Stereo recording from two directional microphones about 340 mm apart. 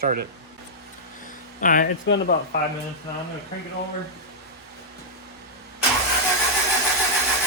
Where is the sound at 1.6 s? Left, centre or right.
Left.